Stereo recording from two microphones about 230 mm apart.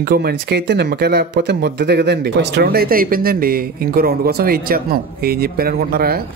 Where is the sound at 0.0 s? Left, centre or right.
Right.